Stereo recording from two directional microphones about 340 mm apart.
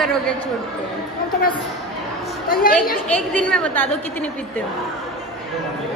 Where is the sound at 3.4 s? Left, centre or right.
Centre.